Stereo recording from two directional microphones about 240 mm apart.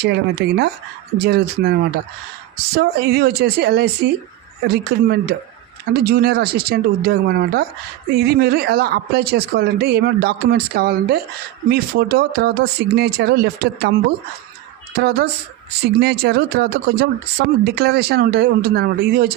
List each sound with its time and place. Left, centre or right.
0.0 s speech: right
2.7 s speech: right
14.9 s speech: right